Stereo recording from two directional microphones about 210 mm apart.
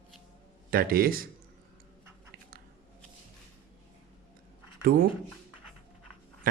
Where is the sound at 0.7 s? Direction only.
45° right (ahead or behind).